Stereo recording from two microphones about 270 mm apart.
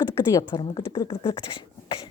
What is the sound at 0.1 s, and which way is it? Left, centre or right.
Speech, centre.